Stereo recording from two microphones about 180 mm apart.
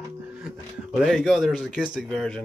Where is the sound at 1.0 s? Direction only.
Centre (ahead or behind).